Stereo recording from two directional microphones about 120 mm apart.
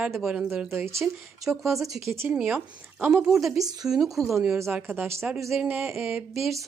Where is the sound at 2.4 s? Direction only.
10° right (ahead or behind).